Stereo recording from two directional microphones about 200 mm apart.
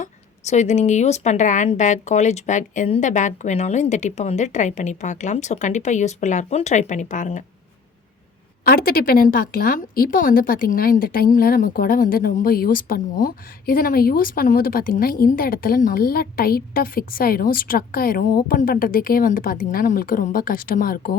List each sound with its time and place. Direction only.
0.0 s speech: 35° left (ahead or behind)
8.6 s speech: 45° left (ahead or behind)